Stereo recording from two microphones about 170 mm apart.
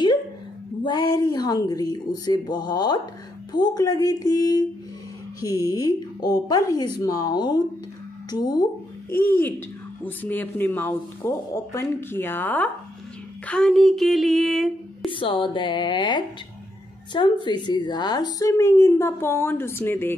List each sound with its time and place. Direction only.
0.8 s speech: 25° left (ahead or behind)
9.1 s a woman's voice: 10° left (ahead or behind)
15.0 s a woman's voice: 30° left (ahead or behind); by 20.2 s 15° left (ahead or behind)